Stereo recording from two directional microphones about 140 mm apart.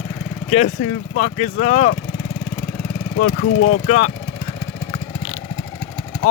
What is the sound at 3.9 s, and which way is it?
Speech, 55° left (ahead or behind).